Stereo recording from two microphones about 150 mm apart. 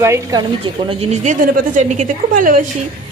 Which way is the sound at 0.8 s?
45° right (ahead or behind).